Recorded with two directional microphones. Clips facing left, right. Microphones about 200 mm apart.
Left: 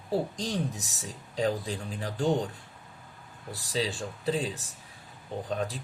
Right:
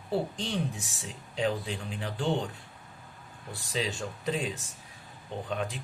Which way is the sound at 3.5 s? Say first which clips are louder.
Left 2 dB; 35° left (ahead or behind).